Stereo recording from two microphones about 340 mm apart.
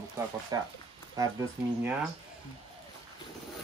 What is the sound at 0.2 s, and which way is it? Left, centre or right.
Speech, centre.